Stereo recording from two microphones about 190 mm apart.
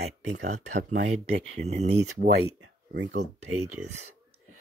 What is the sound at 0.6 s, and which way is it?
Speech, 40° right (ahead or behind).